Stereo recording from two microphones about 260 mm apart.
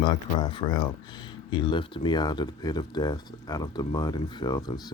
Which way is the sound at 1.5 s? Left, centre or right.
Centre.